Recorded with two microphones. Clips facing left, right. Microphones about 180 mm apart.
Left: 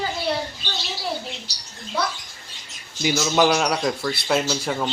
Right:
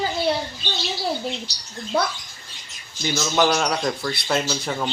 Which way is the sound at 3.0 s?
10° left (ahead or behind).